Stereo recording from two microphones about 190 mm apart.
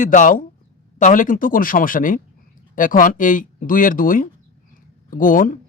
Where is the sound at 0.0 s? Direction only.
45° left (ahead or behind).